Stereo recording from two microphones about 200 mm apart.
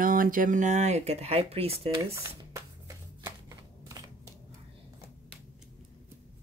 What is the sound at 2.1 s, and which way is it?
Speech, 10° right (ahead or behind).